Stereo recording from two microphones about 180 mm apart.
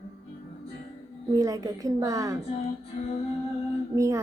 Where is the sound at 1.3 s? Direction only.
20° right (ahead or behind).